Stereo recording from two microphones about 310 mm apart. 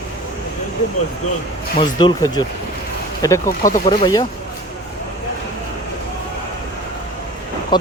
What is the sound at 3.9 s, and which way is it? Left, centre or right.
Speech, centre.